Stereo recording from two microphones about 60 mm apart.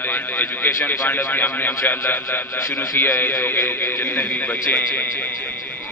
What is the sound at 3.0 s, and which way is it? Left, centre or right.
A man's voice, left.